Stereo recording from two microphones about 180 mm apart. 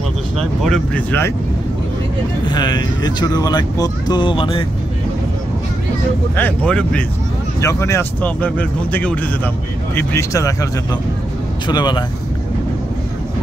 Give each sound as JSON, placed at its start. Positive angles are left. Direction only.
{"t": 0.6, "sound": "speech", "side_deg": 0}
{"t": 2.4, "sound": "speech", "side_deg": 25}
{"t": 6.3, "sound": "speech", "side_deg": 10}